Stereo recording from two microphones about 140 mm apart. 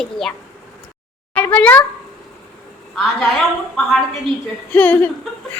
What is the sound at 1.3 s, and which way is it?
Speech, 10° left (ahead or behind).